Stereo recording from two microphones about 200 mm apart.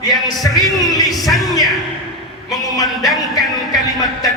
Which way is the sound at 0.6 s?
20° left (ahead or behind).